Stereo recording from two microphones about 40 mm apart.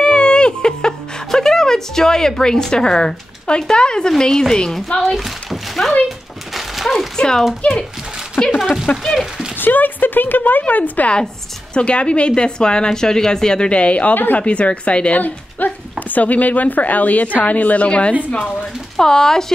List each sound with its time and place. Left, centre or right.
0.0 s a sound: left
1.3 s a woman's voice: centre
5.1 s a sound: centre
7.2 s speech: centre
7.6 s a woman's voice: left
8.9 s a woman's voice: left
9.6 s speech: left
10.7 s a woman's voice: left
11.7 s a woman's voice: left
14.1 s a woman's voice: left
14.4 s a woman's voice: left
17.8 s a woman's voice: left
18.9 s a woman's voice: centre